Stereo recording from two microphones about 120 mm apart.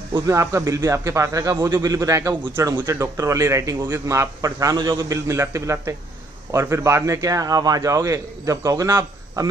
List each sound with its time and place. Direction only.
0.1 s a man's voice: 25° right (ahead or behind)